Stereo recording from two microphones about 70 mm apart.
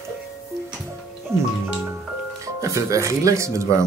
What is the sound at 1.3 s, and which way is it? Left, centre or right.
Speech, right.